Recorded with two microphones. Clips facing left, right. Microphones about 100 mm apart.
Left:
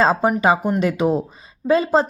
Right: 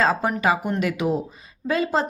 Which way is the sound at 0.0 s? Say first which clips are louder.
Left 4 dB; 25° left (ahead or behind).